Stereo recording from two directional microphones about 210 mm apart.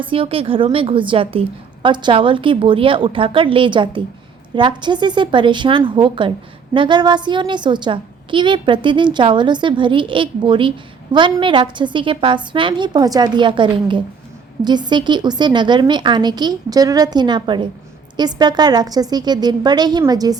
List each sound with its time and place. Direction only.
0.0 s a woman's voice: 25° right (ahead or behind)